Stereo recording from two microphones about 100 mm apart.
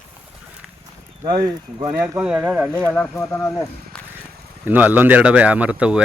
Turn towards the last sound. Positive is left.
turn(degrees=-15)  # may be behind; listen again after turning